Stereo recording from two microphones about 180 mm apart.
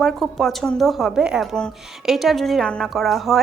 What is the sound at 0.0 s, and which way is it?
A woman's voice, centre (ahead or behind).